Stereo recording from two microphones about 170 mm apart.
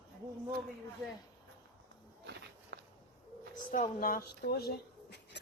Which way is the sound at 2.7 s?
75° right (ahead or behind).